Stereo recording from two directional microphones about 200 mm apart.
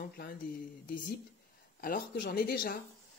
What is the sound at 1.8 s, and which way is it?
Speech, 45° left (ahead or behind).